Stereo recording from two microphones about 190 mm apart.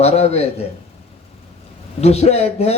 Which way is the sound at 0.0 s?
35° left (ahead or behind).